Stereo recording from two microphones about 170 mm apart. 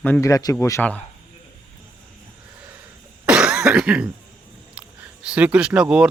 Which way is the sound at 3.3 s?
5° right (ahead or behind).